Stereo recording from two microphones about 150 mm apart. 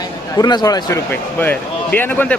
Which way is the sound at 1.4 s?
15° left (ahead or behind).